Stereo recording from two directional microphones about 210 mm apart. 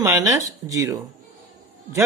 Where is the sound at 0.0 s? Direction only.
15° right (ahead or behind).